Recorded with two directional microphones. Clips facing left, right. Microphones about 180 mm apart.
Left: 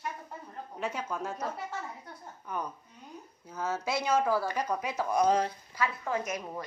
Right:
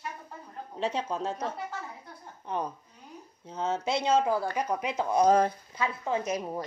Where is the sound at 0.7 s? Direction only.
30° right (ahead or behind).